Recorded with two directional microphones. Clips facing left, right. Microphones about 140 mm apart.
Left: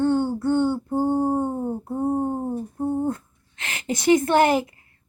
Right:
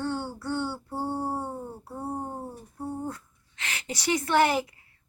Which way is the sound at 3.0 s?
50° left (ahead or behind).